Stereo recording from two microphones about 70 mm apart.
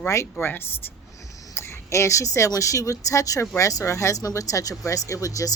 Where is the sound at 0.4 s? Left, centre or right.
Left.